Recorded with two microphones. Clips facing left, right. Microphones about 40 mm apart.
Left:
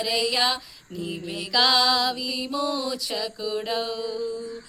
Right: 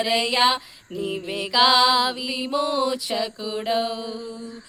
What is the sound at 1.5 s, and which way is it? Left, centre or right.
Mantra, right.